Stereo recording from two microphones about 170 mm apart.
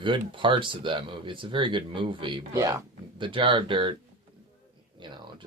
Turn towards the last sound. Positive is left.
turn(degrees=-30)  # may be behind; listen again after turning